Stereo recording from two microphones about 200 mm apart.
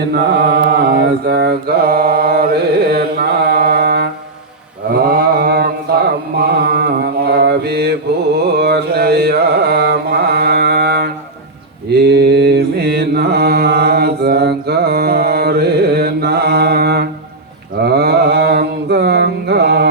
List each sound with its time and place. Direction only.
0.1 s mantra: 50° right (ahead or behind)